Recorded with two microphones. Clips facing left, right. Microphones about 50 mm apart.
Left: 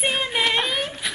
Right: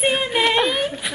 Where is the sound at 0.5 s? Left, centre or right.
Centre.